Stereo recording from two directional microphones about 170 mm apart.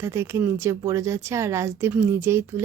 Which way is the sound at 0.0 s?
15° right (ahead or behind).